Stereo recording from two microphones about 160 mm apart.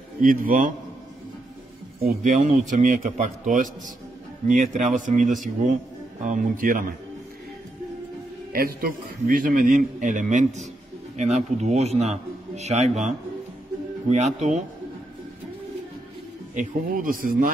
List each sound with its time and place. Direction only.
0.2 s a man's voice: 60° right (ahead or behind)
2.0 s a man's voice: 55° right (ahead or behind)
8.5 s a man's voice: 65° right (ahead or behind); by 14.6 s 45° right (ahead or behind)
16.5 s a man's voice: 60° right (ahead or behind)